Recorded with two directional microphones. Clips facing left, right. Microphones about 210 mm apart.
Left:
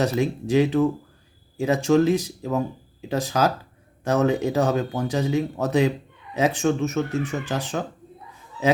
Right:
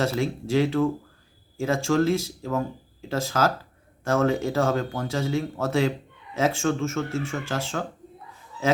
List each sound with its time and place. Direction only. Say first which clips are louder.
0.0 s speech: left 3 dB; 15° left (ahead or behind)